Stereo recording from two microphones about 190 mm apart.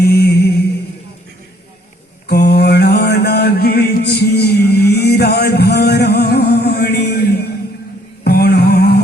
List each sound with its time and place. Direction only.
0.0 s music: 55° left (ahead or behind)
2.2 s mantra: 60° left (ahead or behind)